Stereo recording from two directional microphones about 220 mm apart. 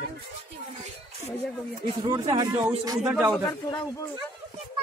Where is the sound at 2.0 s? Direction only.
20° right (ahead or behind).